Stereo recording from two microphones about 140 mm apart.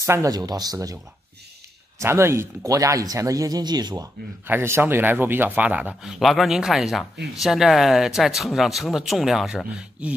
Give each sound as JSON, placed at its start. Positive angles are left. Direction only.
{"t": 0.0, "sound": "speech", "side_deg": -20}
{"t": 2.0, "sound": "speech", "side_deg": -20}
{"t": 4.5, "sound": "speech", "side_deg": -15}